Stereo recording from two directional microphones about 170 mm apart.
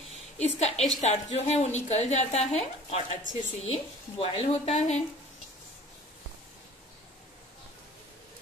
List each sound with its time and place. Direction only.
0.4 s a woman's voice: 40° left (ahead or behind)